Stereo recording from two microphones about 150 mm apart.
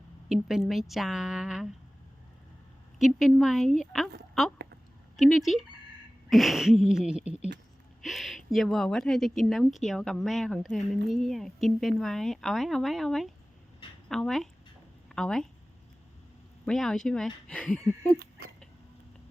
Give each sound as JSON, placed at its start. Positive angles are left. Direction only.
{"t": 0.3, "sound": "a woman's voice", "side_deg": -5}
{"t": 3.0, "sound": "a woman's voice", "side_deg": 0}
{"t": 16.6, "sound": "a woman's voice", "side_deg": 0}
{"t": 18.2, "sound": "a sound", "side_deg": -90}